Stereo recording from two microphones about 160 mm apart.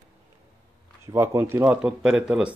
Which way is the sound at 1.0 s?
15° right (ahead or behind).